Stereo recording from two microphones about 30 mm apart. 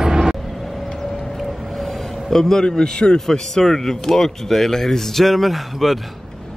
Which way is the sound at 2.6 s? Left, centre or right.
Left.